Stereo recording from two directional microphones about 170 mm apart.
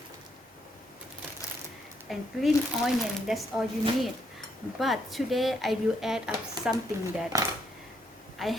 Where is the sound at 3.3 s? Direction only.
Centre (ahead or behind).